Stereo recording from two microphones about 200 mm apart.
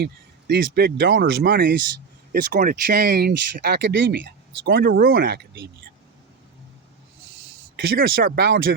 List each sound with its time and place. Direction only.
0.0 s speech: 50° right (ahead or behind)
7.8 s speech: 50° right (ahead or behind)